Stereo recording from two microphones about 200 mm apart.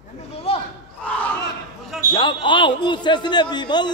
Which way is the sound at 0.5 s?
30° left (ahead or behind).